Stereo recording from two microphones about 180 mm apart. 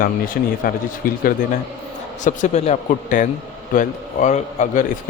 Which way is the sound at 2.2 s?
40° left (ahead or behind).